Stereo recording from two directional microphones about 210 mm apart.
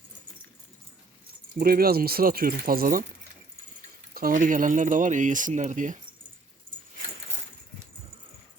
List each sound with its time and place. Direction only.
1.5 s speech: 45° right (ahead or behind)
4.1 s speech: 40° right (ahead or behind)